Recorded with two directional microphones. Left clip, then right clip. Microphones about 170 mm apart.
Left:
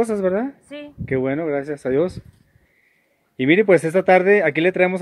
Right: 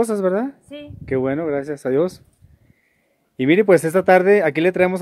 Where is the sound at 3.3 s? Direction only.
20° right (ahead or behind).